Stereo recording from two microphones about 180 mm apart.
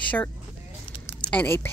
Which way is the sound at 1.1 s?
5° left (ahead or behind).